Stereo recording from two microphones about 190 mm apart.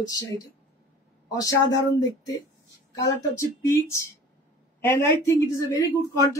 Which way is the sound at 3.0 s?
15° left (ahead or behind).